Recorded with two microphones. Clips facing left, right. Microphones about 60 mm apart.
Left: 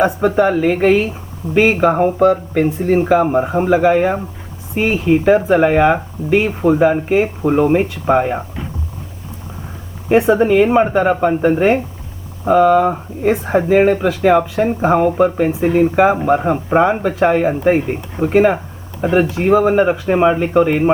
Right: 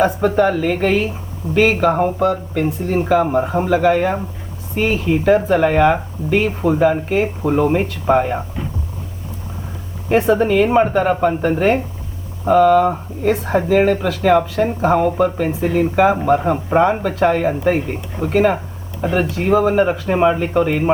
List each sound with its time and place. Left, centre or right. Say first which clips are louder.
0.0 s speech: left 1 dB; centre
10.1 s speech: left 3 dB; centre